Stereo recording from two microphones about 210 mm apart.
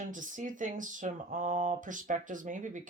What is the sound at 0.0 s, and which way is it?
Speech, 40° right (ahead or behind).